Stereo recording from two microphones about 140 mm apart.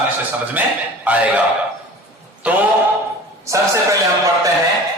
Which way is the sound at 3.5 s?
20° right (ahead or behind).